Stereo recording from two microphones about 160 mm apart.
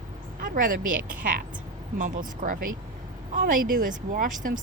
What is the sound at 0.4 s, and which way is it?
Speech, 60° right (ahead or behind).